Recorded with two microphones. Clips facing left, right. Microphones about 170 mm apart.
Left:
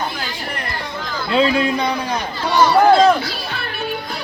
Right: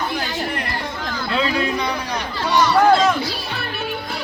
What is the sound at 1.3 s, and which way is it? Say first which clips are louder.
Speech: left 5 dB; 25° left (ahead or behind).